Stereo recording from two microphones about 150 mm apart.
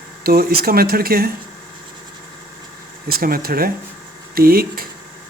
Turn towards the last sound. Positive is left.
turn(degrees=-80)